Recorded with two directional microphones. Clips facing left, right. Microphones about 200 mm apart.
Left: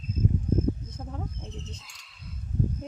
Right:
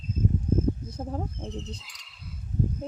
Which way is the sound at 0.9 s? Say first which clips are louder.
Right 5 dB; 35° right (ahead or behind).